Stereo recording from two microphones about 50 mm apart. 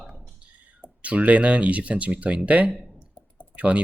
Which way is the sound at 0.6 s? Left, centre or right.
Right.